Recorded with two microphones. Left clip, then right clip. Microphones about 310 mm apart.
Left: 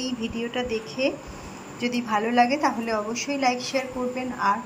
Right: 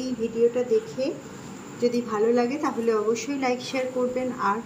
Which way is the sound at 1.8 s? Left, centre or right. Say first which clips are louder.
Right 3 dB; centre.